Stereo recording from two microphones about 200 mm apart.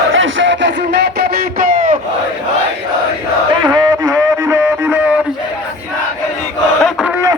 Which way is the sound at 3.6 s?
20° right (ahead or behind).